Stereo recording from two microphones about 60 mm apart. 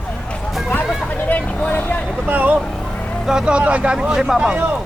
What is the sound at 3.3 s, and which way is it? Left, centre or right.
Speech, centre.